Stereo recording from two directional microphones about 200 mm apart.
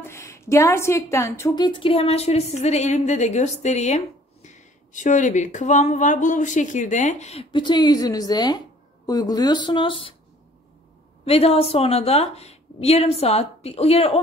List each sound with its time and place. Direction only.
0.0 s a woman's voice: 15° left (ahead or behind)
11.2 s a woman's voice: 30° left (ahead or behind)